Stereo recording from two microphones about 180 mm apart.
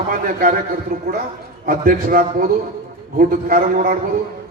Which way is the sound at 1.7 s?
50° right (ahead or behind).